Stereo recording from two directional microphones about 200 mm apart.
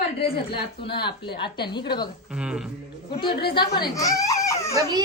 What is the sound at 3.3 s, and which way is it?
Speech, 50° left (ahead or behind).